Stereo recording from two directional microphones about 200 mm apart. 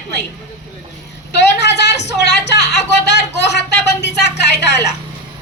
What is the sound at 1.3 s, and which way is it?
Speech, 60° left (ahead or behind).